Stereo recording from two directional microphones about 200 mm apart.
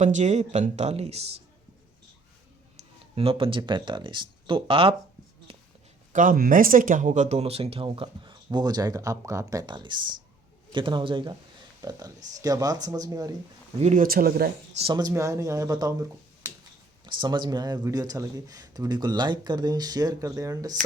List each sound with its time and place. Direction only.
0.0 s speech: 35° right (ahead or behind)
3.2 s speech: 25° right (ahead or behind)
5.5 s a sound: 30° right (ahead or behind)
6.1 s speech: 45° right (ahead or behind); by 13.3 s 20° right (ahead or behind)
13.7 s speech: 35° right (ahead or behind)
14.8 s speech: 25° right (ahead or behind)
17.1 s speech: 25° right (ahead or behind)